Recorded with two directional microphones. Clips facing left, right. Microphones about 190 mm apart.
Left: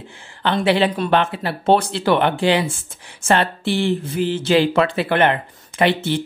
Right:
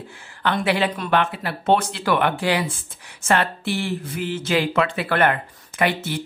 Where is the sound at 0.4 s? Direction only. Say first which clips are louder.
Left 4 dB; 30° left (ahead or behind).